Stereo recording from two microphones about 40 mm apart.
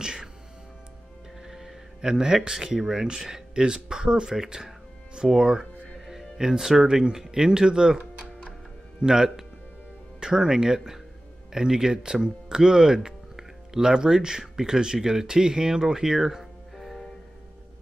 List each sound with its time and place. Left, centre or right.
0.0 s speech: centre
1.5 s music: centre
2.0 s speech: centre
5.9 s music: centre
6.3 s speech: centre
9.0 s speech: centre
16.7 s music: centre